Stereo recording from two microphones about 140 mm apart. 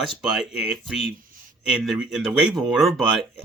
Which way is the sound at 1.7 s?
5° right (ahead or behind).